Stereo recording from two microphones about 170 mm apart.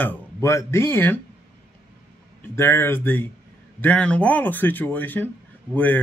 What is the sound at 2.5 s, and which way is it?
A man's voice, 15° left (ahead or behind).